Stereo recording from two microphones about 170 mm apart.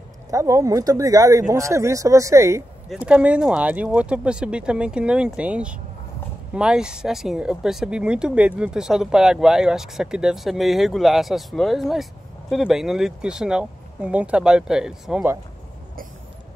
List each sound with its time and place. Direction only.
0.3 s speech: 20° right (ahead or behind)
2.9 s speech: 5° right (ahead or behind)